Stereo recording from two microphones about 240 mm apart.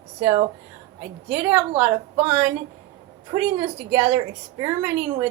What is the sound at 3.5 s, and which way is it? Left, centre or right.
A woman's voice, centre.